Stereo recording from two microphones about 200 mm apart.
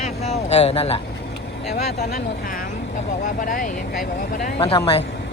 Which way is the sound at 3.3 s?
40° left (ahead or behind).